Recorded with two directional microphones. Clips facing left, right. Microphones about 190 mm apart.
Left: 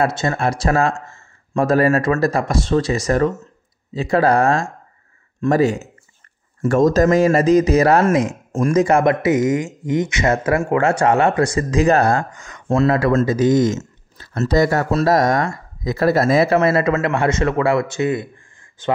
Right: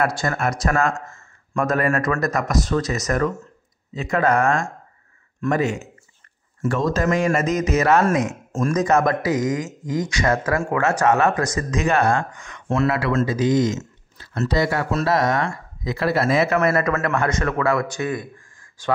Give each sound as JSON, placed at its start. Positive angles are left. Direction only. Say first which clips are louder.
{"t": 0.0, "sound": "speech", "louder": "left 3 dB", "side_deg": 25}